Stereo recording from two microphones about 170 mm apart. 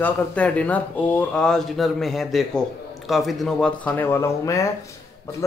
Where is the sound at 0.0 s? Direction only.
10° left (ahead or behind).